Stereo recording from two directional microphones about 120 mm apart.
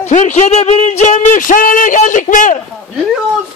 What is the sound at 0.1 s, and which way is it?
A man's voice, 80° left.